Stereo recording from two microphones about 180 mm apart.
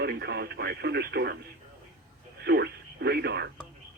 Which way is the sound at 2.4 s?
65° right (ahead or behind).